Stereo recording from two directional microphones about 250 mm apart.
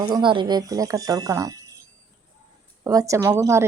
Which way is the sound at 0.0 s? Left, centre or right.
Centre.